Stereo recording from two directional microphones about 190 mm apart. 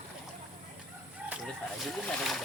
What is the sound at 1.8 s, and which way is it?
Speech, centre (ahead or behind).